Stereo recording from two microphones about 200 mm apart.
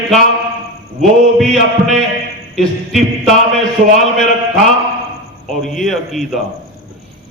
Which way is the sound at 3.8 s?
40° right (ahead or behind).